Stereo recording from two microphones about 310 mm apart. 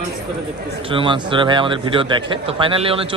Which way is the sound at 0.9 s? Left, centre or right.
Centre.